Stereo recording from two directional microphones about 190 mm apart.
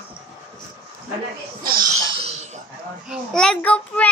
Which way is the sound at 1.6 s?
50° right (ahead or behind).